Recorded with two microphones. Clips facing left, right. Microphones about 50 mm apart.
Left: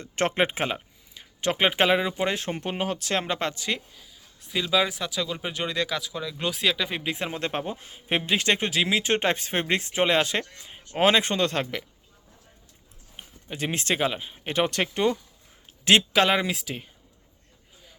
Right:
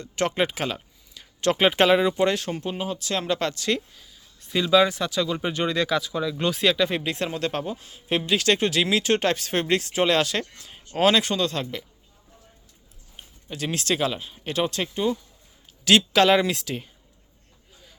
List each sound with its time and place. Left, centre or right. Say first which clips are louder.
0.0 s speech: even; left
1.2 s speech: right 3 dB; centre
2.4 s speech: even; left
3.2 s speech: right 3 dB; left
7.3 s speech: right 2 dB; left
11.0 s speech: right 1 dB; left
13.1 s speech: even; left
14.5 s speech: left 1 dB; left
15.8 s speech: right 1 dB; left
16.1 s speech: right 3 dB; centre